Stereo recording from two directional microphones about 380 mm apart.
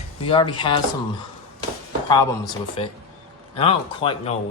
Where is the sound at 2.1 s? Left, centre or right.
Centre.